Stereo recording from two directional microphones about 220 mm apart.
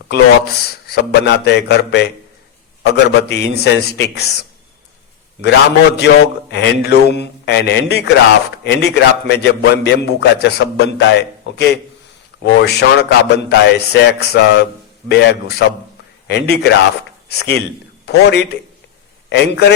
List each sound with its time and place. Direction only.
0.1 s a man's voice: 45° left (ahead or behind)
6.0 s a man's voice: 50° left (ahead or behind)